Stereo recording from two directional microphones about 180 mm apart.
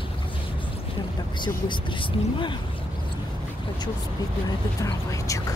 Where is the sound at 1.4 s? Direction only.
25° left (ahead or behind).